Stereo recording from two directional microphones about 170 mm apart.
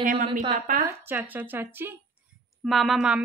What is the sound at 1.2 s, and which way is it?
Speech, 10° right (ahead or behind).